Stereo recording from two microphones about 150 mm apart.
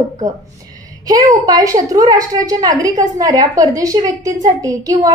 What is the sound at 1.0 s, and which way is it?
A woman's voice, 25° right (ahead or behind).